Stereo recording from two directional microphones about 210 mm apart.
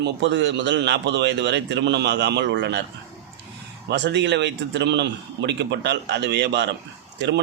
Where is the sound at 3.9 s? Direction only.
55° right (ahead or behind).